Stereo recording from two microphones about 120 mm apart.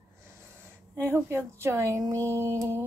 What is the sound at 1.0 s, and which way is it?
Speech, 20° right (ahead or behind).